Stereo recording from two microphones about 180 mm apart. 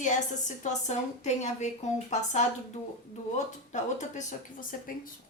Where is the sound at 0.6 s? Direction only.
40° left (ahead or behind).